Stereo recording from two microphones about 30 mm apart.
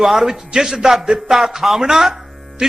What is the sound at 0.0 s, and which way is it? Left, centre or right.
A man's voice, centre.